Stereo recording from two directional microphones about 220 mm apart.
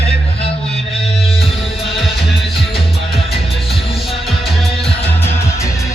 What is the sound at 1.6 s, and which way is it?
Music, centre (ahead or behind).